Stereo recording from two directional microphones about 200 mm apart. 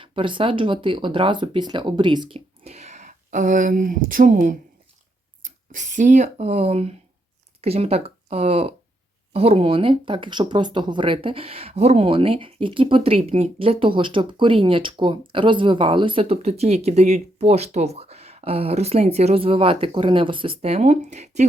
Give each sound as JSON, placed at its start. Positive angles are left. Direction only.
{"t": 0.0, "sound": "speech", "side_deg": -25}